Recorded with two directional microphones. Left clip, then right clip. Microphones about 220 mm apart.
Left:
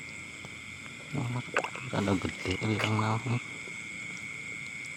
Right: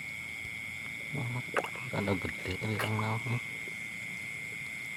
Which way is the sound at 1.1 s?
20° left (ahead or behind).